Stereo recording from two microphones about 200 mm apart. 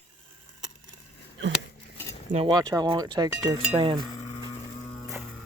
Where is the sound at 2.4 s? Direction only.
20° right (ahead or behind).